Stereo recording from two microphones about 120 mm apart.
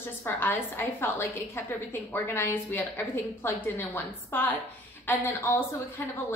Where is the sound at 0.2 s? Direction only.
20° left (ahead or behind).